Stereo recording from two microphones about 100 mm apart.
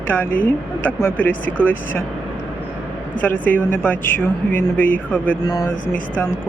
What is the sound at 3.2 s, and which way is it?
Speech, 20° left (ahead or behind).